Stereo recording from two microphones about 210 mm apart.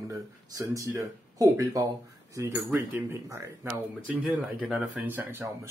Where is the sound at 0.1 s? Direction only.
15° right (ahead or behind).